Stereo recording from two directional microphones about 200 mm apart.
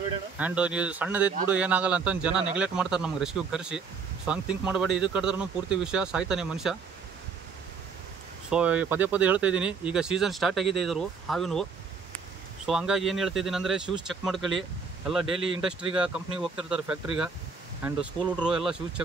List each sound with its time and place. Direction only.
0.4 s speech: 5° right (ahead or behind)
8.5 s speech: 5° right (ahead or behind)
12.6 s speech: 5° right (ahead or behind)
15.3 s speech: 25° right (ahead or behind)
16.0 s speech: 5° right (ahead or behind)
18.4 s speech: 5° right (ahead or behind)